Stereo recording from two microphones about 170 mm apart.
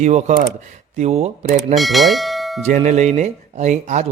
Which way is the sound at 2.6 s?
45° right (ahead or behind).